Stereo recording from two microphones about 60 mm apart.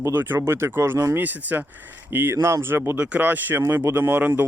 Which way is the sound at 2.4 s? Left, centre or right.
Right.